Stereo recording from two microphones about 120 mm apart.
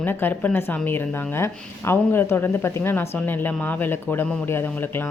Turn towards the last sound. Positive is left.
turn(degrees=20)  # may be behind; listen again after turning